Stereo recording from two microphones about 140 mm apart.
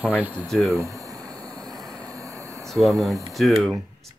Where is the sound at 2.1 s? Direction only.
20° right (ahead or behind).